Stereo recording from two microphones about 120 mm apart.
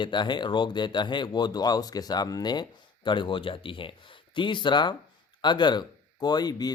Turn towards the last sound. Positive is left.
turn(degrees=35)  # may be behind; listen again after turning